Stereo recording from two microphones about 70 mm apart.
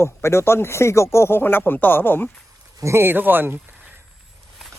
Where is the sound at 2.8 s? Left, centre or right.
Right.